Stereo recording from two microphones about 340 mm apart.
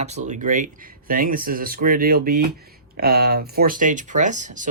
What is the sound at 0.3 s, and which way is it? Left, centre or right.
Speech, right.